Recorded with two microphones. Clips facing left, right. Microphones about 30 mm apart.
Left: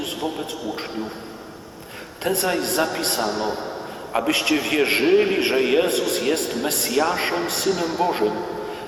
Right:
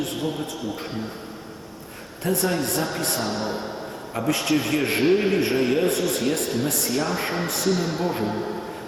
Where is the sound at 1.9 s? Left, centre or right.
Left.